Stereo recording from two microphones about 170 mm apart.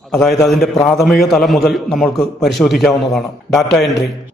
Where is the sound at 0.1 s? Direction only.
Centre (ahead or behind).